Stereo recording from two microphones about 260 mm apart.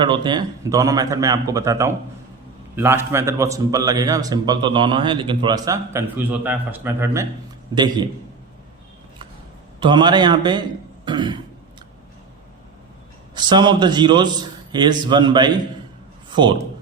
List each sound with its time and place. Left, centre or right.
0.0 s a man's voice: centre
9.8 s a man's voice: centre
13.3 s a man's voice: centre